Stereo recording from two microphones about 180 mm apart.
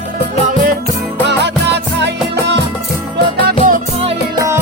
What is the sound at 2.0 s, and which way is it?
Music, 70° right (ahead or behind).